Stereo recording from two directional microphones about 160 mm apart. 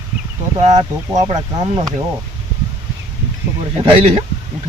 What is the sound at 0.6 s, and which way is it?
Speech, 45° right (ahead or behind).